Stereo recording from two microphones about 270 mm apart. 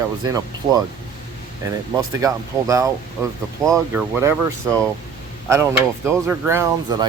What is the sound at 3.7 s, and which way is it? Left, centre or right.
Speech, centre.